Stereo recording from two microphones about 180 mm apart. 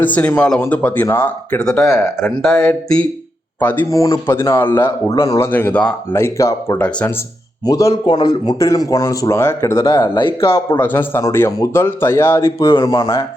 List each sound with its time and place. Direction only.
0.0 s speech: 10° left (ahead or behind)
9.8 s speech: 25° left (ahead or behind)
10.8 s speech: 10° left (ahead or behind)